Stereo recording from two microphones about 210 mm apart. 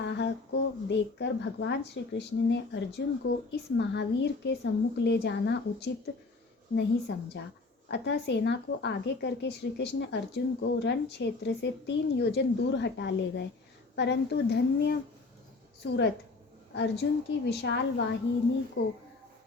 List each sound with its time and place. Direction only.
0.0 s speech: 55° left (ahead or behind)
7.1 s speech: 55° left (ahead or behind)